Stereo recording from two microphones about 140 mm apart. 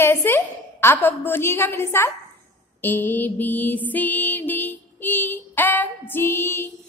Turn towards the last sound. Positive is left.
turn(degrees=15)  # may be behind; listen again after turning